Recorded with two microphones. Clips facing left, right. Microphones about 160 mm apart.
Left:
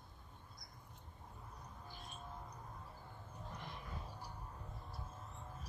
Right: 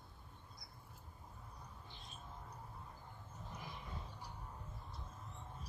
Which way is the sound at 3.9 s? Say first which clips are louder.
Left 1 dB; 10° left (ahead or behind).